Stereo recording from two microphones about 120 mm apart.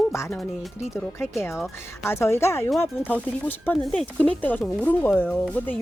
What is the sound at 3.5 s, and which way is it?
Speech, 10° left (ahead or behind).